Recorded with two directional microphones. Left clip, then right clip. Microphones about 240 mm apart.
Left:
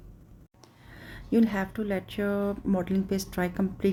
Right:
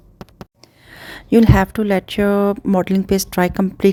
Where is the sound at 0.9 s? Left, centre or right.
Right.